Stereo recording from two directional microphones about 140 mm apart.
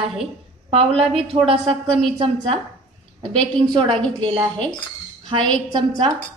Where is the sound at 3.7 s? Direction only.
35° right (ahead or behind).